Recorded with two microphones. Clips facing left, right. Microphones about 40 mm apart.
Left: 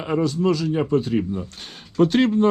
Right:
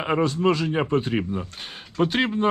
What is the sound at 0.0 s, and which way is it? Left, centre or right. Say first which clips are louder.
Speech: even; right.